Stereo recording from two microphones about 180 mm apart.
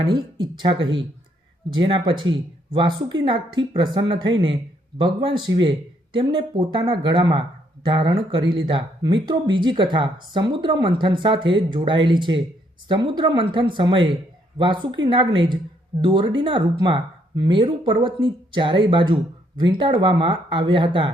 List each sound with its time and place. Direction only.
0.1 s speech: 25° right (ahead or behind)